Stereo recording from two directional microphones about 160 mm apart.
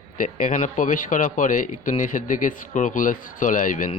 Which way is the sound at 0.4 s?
55° left (ahead or behind).